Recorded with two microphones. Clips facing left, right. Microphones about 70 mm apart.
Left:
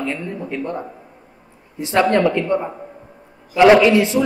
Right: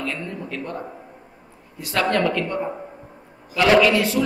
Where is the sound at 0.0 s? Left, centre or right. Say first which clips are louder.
Left 4 dB; centre.